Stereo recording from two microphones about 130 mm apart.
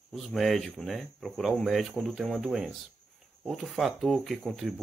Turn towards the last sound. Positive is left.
turn(degrees=0)  # may be behind; listen again after turning